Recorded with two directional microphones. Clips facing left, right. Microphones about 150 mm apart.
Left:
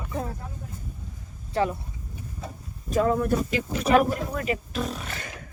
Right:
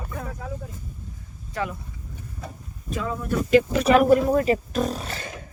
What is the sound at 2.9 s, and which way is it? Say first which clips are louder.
Speech: left 7 dB; 40° left (ahead or behind).